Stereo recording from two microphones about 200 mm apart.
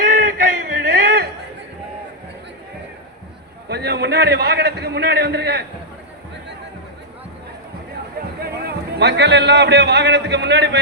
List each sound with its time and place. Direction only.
0.0 s a sound: 45° right (ahead or behind)
3.7 s a man's voice: 55° right (ahead or behind)
8.4 s a man's voice: 50° right (ahead or behind)